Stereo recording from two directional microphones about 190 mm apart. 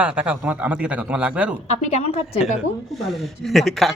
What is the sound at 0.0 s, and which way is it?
Speech, 5° right (ahead or behind).